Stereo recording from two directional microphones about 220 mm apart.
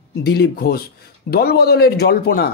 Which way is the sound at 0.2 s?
45° left (ahead or behind).